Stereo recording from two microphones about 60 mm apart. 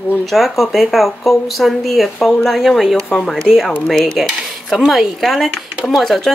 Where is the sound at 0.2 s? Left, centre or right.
Centre.